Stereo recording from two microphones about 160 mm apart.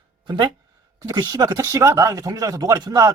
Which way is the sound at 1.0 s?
25° right (ahead or behind).